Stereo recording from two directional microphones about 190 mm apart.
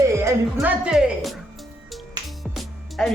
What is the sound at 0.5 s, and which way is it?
Speech, 5° right (ahead or behind).